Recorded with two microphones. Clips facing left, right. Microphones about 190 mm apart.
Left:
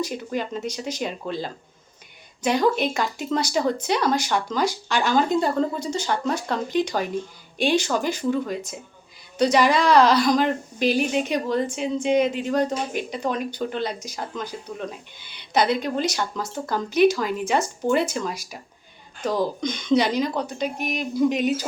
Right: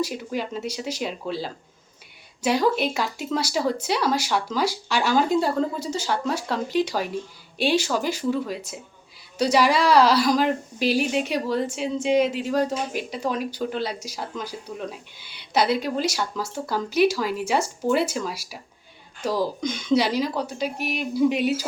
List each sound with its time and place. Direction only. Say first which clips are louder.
0.0 s speech: even; 5° right (ahead or behind)